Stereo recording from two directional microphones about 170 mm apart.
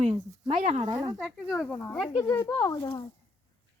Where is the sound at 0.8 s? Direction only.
20° right (ahead or behind).